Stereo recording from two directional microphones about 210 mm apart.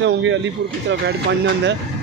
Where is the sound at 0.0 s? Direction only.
60° right (ahead or behind).